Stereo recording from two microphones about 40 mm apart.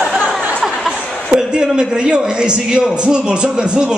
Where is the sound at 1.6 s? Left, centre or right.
Centre.